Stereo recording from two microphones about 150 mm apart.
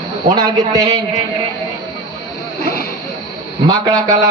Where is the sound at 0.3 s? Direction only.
25° right (ahead or behind).